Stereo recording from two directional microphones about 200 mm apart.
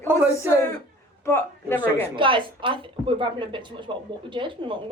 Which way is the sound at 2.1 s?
25° right (ahead or behind).